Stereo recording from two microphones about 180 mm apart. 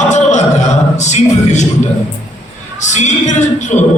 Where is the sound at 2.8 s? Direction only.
40° left (ahead or behind).